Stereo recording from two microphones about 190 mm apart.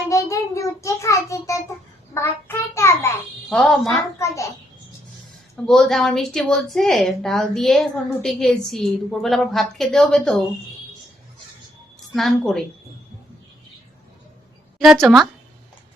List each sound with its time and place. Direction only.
0.1 s child singing: 15° left (ahead or behind)
3.5 s a woman's voice: centre (ahead or behind)
4.2 s a sound: 15° left (ahead or behind)
5.6 s a woman's voice: centre (ahead or behind)
12.1 s a woman's voice: centre (ahead or behind)
14.8 s a woman's voice: centre (ahead or behind)